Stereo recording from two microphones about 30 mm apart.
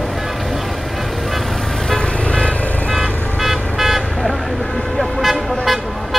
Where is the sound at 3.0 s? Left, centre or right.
Centre.